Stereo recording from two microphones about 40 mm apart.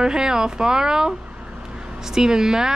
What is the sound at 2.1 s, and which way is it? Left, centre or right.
Speech, centre.